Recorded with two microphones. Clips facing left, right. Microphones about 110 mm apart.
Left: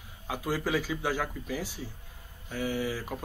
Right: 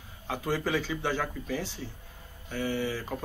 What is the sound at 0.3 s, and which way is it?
A man's voice, 5° left (ahead or behind).